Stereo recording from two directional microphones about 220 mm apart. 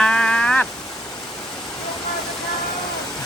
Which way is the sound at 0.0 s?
5° left (ahead or behind).